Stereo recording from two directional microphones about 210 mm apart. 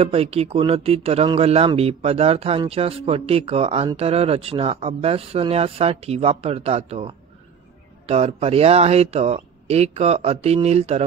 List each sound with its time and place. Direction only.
0.0 s speech: 30° right (ahead or behind)